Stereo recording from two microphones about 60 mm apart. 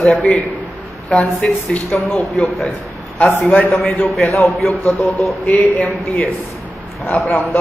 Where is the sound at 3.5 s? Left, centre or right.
Left.